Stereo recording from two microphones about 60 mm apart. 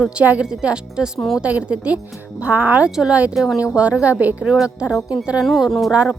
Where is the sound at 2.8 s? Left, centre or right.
Centre.